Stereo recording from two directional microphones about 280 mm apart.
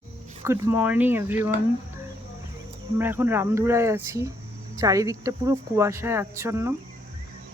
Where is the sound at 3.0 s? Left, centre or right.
Centre.